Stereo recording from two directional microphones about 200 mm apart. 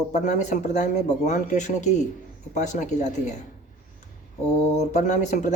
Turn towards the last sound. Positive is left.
turn(degrees=35)  # may be behind; listen again after turning